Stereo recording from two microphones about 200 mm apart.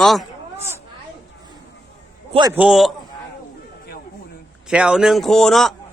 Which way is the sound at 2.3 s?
20° right (ahead or behind).